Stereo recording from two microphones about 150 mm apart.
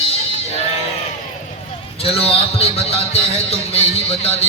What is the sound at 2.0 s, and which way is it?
A man's voice, 40° left (ahead or behind).